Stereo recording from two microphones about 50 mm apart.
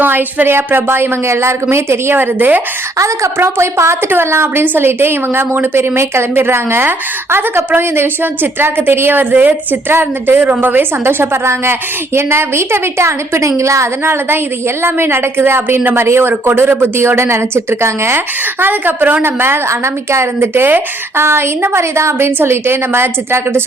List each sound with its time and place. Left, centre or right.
0.0 s a woman's voice: right
2.1 s a woman's voice: right
3.3 s a woman's voice: right
4.6 s a woman's voice: right
9.3 s a woman's voice: right
9.9 s a woman's voice: right
15.8 s a woman's voice: right
18.6 s a woman's voice: right
19.6 s a woman's voice: right
22.4 s a woman's voice: right